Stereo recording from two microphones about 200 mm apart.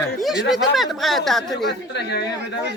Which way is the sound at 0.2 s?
Centre (ahead or behind).